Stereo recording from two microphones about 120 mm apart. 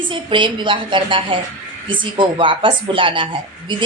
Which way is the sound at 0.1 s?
45° right (ahead or behind).